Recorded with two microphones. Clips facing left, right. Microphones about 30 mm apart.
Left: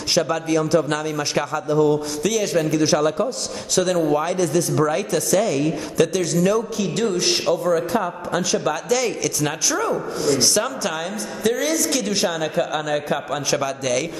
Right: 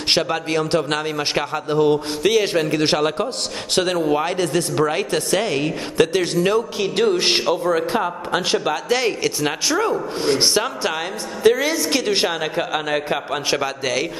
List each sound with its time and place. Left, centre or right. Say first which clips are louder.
0.1 s speech: even; right